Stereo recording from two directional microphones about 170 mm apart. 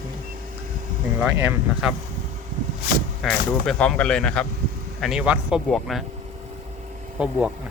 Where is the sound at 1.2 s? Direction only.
10° right (ahead or behind).